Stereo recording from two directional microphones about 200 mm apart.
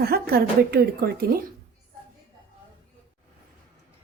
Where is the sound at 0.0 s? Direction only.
50° right (ahead or behind).